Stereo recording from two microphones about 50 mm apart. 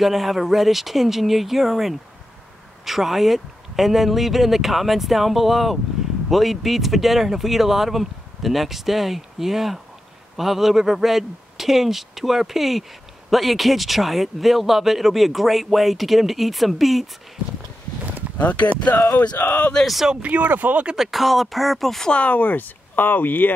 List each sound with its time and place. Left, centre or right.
0.0 s speech: centre
18.4 s speech: left
20.1 s speech: right
20.8 s speech: centre
22.1 s speech: left